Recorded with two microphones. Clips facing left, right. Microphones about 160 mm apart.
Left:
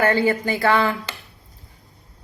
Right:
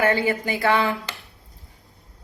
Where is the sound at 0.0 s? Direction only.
15° right (ahead or behind).